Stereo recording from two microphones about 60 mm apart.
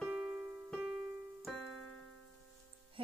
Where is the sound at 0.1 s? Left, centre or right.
Centre.